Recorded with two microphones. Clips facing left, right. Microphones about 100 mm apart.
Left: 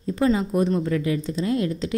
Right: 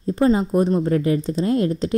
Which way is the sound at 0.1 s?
35° right (ahead or behind).